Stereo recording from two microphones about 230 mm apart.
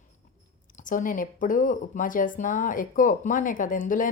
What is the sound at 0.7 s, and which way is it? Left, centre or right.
A woman's voice, left.